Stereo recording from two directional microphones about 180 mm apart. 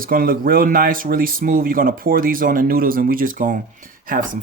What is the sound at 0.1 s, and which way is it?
Speech, 50° right (ahead or behind).